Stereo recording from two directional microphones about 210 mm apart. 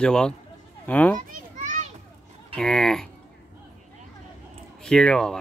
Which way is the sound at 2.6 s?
5° left (ahead or behind).